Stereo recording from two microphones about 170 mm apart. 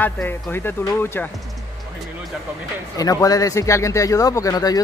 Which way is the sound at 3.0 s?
20° left (ahead or behind).